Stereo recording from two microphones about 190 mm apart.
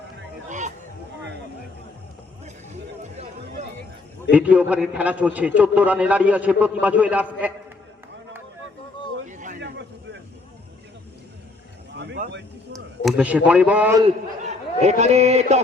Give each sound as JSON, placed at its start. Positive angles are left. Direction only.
{"t": 0.4, "sound": "hubbub", "side_deg": -40}
{"t": 4.3, "sound": "a man's voice", "side_deg": -5}
{"t": 9.2, "sound": "a sound", "side_deg": -40}
{"t": 9.6, "sound": "a sound", "side_deg": -65}
{"t": 13.1, "sound": "a man's voice", "side_deg": -5}
{"t": 14.0, "sound": "a man's voice", "side_deg": -35}